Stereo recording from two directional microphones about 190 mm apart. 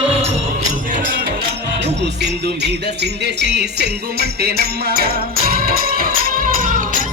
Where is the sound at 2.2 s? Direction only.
60° right (ahead or behind).